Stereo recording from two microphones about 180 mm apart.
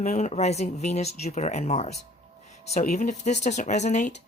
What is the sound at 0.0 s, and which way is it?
Speech, 40° left (ahead or behind).